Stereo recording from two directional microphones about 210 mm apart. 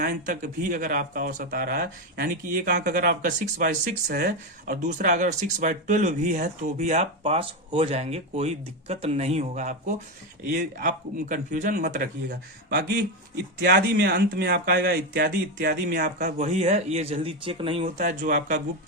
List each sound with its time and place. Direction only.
0.0 s speech: 40° right (ahead or behind)
12.3 s speech: 50° right (ahead or behind); by 17.8 s 25° right (ahead or behind)
17.8 s speech: 35° right (ahead or behind)